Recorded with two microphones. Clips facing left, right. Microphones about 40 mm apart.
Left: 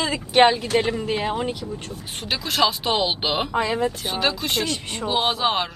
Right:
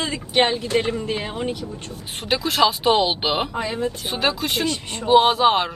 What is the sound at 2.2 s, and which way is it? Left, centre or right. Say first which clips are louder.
Speech: right 3 dB; centre.